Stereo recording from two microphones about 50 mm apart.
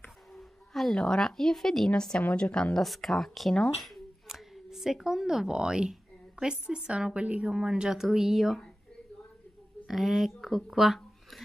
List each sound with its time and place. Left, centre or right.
0.3 s a sound: centre
0.9 s speech: centre
2.1 s a woman's voice: left
2.8 s speech: centre
3.7 s a sound: centre
4.6 s a woman's voice: centre
9.8 s speech: centre